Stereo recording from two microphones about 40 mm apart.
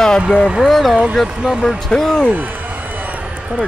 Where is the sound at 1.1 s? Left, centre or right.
Centre.